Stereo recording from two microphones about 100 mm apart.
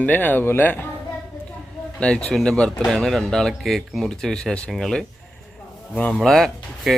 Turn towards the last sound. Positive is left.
turn(degrees=0)  # may be behind; listen again after turning